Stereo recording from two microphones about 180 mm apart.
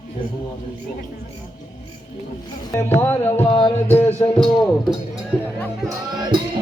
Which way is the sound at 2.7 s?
10° left (ahead or behind).